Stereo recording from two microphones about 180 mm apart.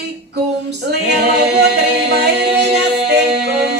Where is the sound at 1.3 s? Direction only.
65° right (ahead or behind).